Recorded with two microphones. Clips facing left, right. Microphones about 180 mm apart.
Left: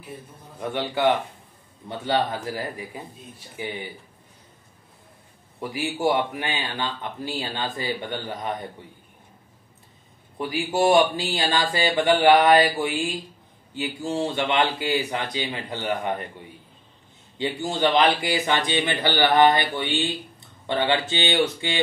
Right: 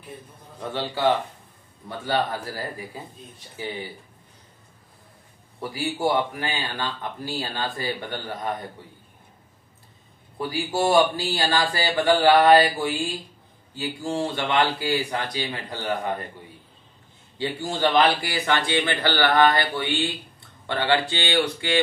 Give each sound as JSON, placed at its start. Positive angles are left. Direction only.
{"t": 0.6, "sound": "a man's voice", "side_deg": 15}
{"t": 5.6, "sound": "speech", "side_deg": 20}
{"t": 10.5, "sound": "speech", "side_deg": 20}
{"t": 13.7, "sound": "speech", "side_deg": 20}
{"t": 17.4, "sound": "speech", "side_deg": 20}